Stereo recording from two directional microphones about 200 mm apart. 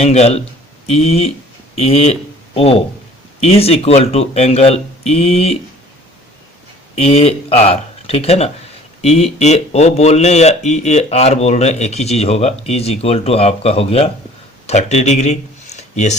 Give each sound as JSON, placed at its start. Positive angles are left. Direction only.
{"t": 0.0, "sound": "a man's voice", "side_deg": 30}
{"t": 6.9, "sound": "speech", "side_deg": 30}